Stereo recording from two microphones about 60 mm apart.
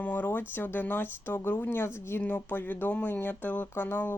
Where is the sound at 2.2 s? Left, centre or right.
Left.